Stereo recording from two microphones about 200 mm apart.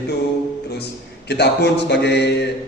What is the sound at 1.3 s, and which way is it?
A man's voice, 55° left (ahead or behind).